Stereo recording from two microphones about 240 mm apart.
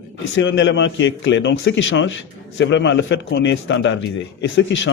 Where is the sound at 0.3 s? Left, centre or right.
Left.